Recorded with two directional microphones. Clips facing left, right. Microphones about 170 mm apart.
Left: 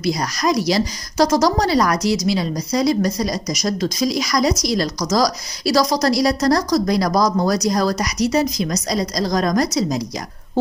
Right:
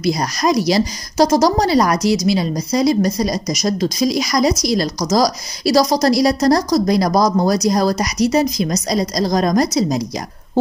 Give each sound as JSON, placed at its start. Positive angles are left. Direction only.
{"t": 0.0, "sound": "a woman's voice", "side_deg": -30}
{"t": 2.0, "sound": "a woman's voice", "side_deg": -10}
{"t": 3.8, "sound": "a woman's voice", "side_deg": -15}
{"t": 4.3, "sound": "a woman's voice", "side_deg": -25}